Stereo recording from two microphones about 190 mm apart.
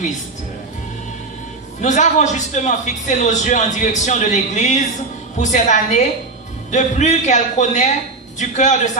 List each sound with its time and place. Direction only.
1.8 s a man's voice: 40° left (ahead or behind)